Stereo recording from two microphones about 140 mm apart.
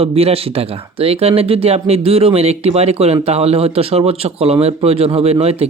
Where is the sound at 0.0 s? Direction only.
45° right (ahead or behind).